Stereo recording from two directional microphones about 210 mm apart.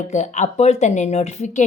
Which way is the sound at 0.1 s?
35° left (ahead or behind).